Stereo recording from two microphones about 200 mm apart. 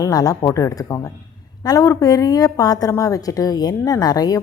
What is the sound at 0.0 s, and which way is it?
A woman's voice, 20° left (ahead or behind).